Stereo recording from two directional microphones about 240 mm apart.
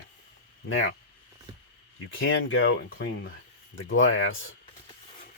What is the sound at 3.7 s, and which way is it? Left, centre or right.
Speech, left.